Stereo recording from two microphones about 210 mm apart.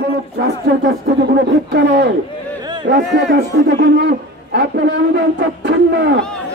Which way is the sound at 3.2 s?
55° right (ahead or behind).